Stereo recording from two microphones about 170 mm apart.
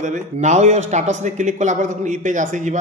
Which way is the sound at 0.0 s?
45° right (ahead or behind).